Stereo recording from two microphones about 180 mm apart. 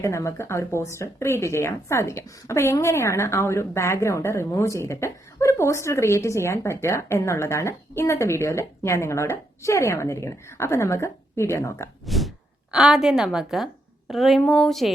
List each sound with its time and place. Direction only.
0.0 s speech: 15° left (ahead or behind)
12.0 s a sound: centre (ahead or behind)
12.7 s a woman's voice: 5° right (ahead or behind)